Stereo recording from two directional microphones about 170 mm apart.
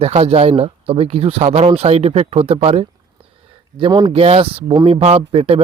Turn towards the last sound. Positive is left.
turn(degrees=-35)  # may be behind; listen again after turning